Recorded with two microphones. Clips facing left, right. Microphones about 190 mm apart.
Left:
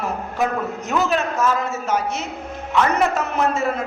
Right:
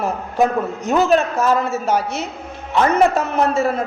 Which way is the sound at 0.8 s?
35° right (ahead or behind).